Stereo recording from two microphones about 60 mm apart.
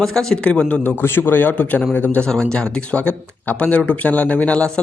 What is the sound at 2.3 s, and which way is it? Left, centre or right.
Speech, centre.